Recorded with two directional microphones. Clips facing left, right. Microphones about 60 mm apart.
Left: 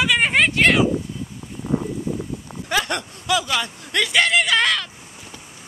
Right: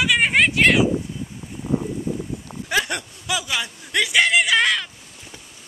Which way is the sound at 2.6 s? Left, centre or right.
Centre.